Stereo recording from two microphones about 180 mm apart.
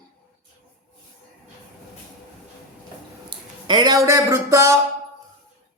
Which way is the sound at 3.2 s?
25° right (ahead or behind).